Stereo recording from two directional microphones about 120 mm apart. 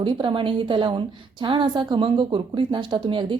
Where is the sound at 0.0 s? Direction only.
45° right (ahead or behind).